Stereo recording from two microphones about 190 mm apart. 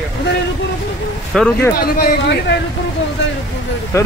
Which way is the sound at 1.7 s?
55° left (ahead or behind).